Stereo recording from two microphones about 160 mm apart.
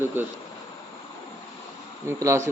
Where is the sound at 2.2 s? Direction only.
20° right (ahead or behind).